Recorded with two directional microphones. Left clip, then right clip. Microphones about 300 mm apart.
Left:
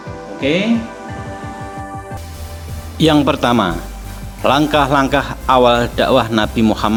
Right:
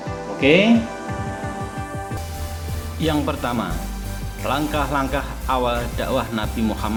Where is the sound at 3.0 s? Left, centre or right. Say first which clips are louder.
Left 10 dB; left.